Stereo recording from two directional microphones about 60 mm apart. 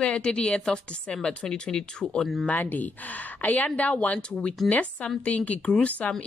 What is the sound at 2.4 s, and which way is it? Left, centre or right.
A woman's voice, left.